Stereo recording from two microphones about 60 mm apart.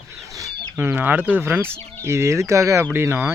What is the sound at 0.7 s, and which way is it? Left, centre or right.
Speech, right.